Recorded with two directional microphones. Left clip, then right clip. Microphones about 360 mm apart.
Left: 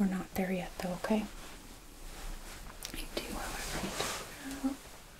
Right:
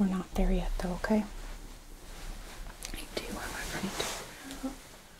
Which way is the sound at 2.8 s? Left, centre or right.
Right.